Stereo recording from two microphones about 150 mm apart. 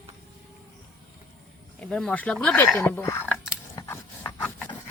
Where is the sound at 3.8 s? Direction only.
20° left (ahead or behind).